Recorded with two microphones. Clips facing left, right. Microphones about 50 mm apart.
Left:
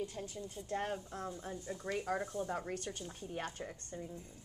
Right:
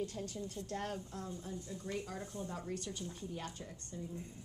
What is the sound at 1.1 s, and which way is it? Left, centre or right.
A woman's voice, left.